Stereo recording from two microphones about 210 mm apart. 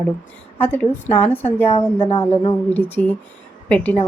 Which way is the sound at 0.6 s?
10° left (ahead or behind).